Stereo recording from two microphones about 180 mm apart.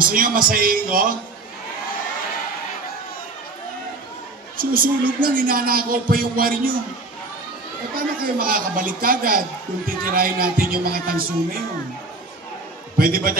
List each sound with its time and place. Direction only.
0.0 s speech: 50° right (ahead or behind)
4.6 s speech: 50° right (ahead or behind)
7.9 s speech: 50° right (ahead or behind)
12.9 s speech: 55° right (ahead or behind)